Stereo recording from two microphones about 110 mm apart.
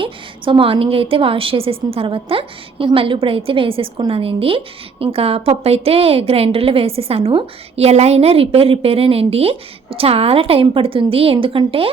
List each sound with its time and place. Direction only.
0.0 s a woman's voice: 50° right (ahead or behind)